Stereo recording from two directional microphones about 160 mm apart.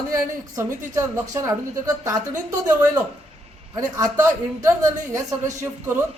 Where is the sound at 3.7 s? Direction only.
20° right (ahead or behind).